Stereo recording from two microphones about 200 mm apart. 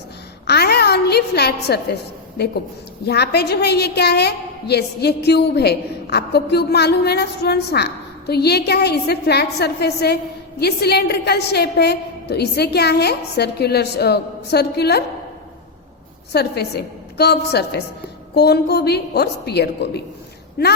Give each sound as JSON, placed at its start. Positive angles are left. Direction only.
{"t": 0.4, "sound": "a sound", "side_deg": 55}
{"t": 3.1, "sound": "a woman's voice", "side_deg": 55}
{"t": 16.3, "sound": "a woman's voice", "side_deg": 55}